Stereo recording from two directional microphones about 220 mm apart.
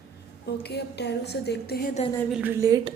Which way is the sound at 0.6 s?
50° left (ahead or behind).